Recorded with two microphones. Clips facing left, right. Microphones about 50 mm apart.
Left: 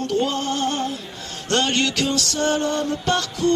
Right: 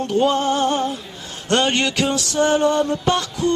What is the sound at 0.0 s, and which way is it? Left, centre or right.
Music, centre.